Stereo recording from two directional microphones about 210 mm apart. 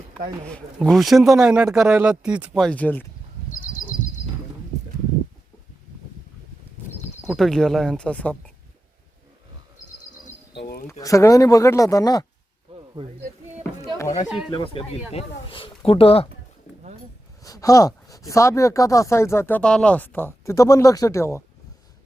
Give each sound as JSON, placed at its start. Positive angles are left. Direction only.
{"t": 0.4, "sound": "speech", "side_deg": 5}
{"t": 3.5, "sound": "bird", "side_deg": 40}
{"t": 7.3, "sound": "speech", "side_deg": 0}
{"t": 10.5, "sound": "a sound", "side_deg": 50}
{"t": 10.8, "sound": "speech", "side_deg": 15}
{"t": 12.7, "sound": "a sound", "side_deg": -25}
{"t": 14.3, "sound": "speech", "side_deg": 0}
{"t": 14.5, "sound": "speech", "side_deg": 25}
{"t": 17.4, "sound": "speech", "side_deg": 15}